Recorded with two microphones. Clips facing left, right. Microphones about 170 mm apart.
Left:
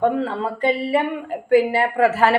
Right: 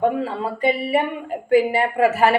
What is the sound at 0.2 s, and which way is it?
Speech, 10° right (ahead or behind).